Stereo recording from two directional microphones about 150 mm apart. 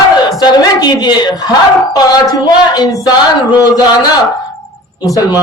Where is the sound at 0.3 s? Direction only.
25° left (ahead or behind).